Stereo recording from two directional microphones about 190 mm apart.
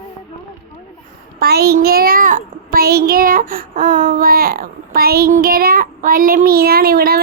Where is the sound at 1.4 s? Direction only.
55° right (ahead or behind).